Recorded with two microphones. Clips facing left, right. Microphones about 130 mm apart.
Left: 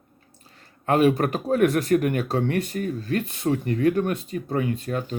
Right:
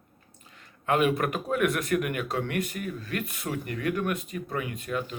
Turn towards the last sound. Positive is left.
turn(degrees=35)  # may be behind; listen again after turning